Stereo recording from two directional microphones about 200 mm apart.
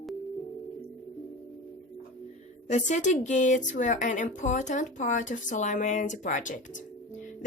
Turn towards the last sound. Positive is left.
turn(degrees=40)  # may be behind; listen again after turning